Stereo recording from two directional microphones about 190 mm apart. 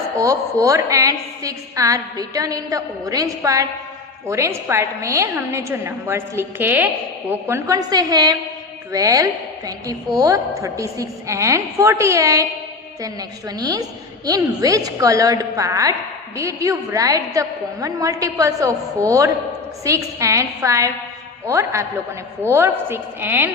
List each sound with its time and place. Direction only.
0.2 s a woman's voice: 15° right (ahead or behind)
13.6 s a woman's voice: 20° right (ahead or behind)